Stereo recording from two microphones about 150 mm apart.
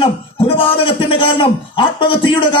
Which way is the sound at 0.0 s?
35° left (ahead or behind).